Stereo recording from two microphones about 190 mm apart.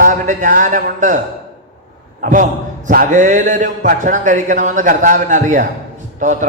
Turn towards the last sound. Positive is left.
turn(degrees=-40)  # may be behind; listen again after turning